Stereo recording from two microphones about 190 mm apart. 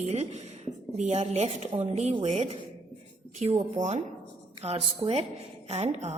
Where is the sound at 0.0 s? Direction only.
35° right (ahead or behind).